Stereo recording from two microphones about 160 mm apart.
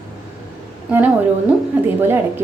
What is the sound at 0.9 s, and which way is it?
A woman's voice, 10° right (ahead or behind).